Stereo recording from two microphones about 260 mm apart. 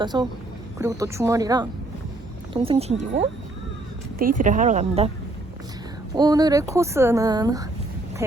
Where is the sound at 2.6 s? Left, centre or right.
Right.